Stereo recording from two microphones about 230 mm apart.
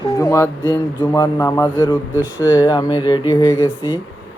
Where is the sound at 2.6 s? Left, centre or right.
Centre.